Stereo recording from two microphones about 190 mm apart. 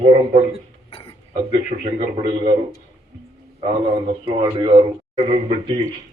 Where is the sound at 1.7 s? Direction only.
35° right (ahead or behind).